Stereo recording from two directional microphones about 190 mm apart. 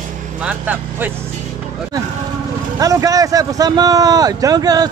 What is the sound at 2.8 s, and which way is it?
Speech, 20° right (ahead or behind).